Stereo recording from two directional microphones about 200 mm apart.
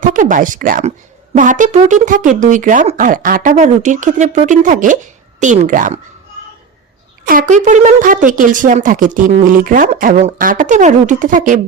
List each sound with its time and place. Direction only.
0.0 s speech: 40° right (ahead or behind)
7.3 s speech: 40° right (ahead or behind)